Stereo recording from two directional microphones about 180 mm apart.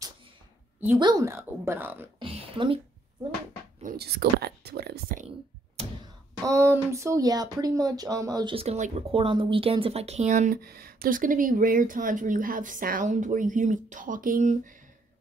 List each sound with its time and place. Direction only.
0.9 s a woman's voice: 25° right (ahead or behind)
2.1 s a sound: 30° right (ahead or behind)
3.8 s speech: 60° right (ahead or behind)
6.4 s speech: 15° right (ahead or behind); by 14.6 s 45° right (ahead or behind)